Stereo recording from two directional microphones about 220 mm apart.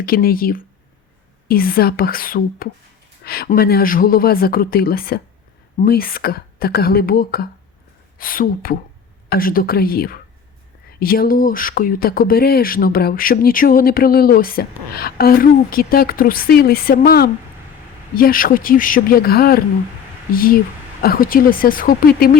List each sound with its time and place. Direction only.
0.0 s speech: 45° left (ahead or behind)